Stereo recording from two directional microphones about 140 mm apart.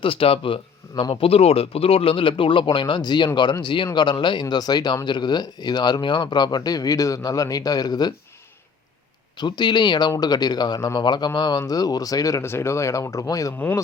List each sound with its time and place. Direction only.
0.0 s speech: 40° left (ahead or behind)
9.4 s speech: 30° left (ahead or behind)
13.6 s speech: 10° left (ahead or behind)